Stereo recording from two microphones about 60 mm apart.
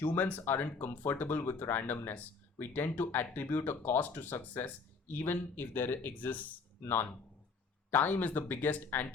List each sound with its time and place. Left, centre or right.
0.0 s speech: left